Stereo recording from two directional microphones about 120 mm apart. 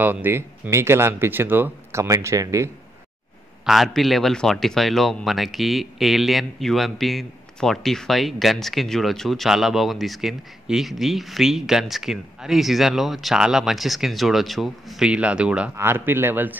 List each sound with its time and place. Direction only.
0.0 s speech: 15° right (ahead or behind)
3.6 s speech: centre (ahead or behind)
15.7 s a man's voice: 20° right (ahead or behind)